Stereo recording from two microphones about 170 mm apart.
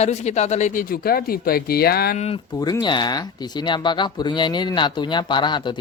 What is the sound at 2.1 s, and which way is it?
Speech, 40° left (ahead or behind).